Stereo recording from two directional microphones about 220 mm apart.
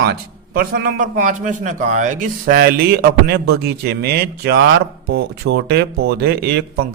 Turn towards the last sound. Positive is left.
turn(degrees=-45)  # may be behind; listen again after turning